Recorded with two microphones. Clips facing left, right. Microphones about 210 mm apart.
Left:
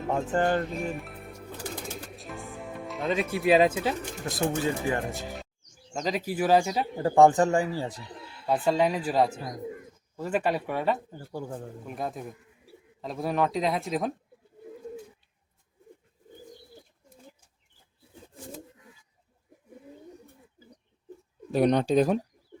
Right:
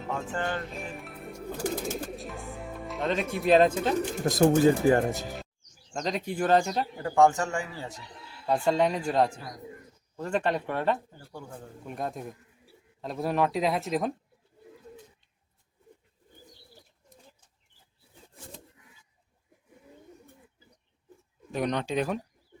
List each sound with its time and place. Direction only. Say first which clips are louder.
0.1 s music: left 7 dB; 40° left (ahead or behind)
0.7 s music: left 6 dB; centre (ahead or behind)
1.6 s bird: right 7 dB; 45° right (ahead or behind)
2.1 s speech: right 1 dB; centre (ahead or behind)
4.3 s speech: right 7 dB; 40° right (ahead or behind)
5.9 s speech: left 1 dB; 5° left (ahead or behind)
7.0 s speech: left 4 dB; 35° left (ahead or behind)
8.4 s speech: even; 5° left (ahead or behind)
21.5 s speech: left 7 dB; 35° left (ahead or behind)